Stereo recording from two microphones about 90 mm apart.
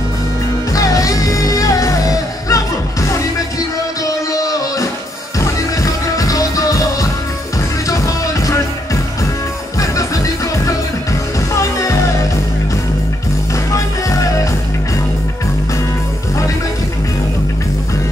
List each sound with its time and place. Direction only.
0.7 s music: 40° left (ahead or behind)
9.8 s music: 40° left (ahead or behind)
13.7 s music: 35° left (ahead or behind)